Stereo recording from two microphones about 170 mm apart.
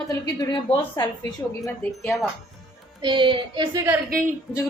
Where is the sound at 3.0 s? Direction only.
30° right (ahead or behind).